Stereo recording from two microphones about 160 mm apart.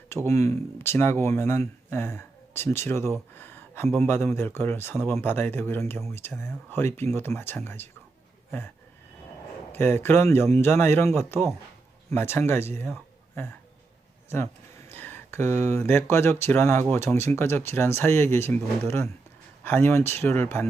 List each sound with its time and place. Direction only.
0.1 s speech: 15° left (ahead or behind)
9.7 s speech: 15° left (ahead or behind)
14.3 s speech: 15° left (ahead or behind)